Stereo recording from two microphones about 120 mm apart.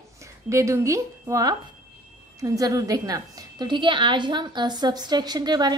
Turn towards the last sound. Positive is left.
turn(degrees=-35)  # may be behind; listen again after turning